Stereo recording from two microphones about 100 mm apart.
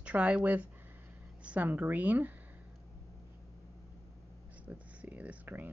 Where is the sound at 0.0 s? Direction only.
10° right (ahead or behind).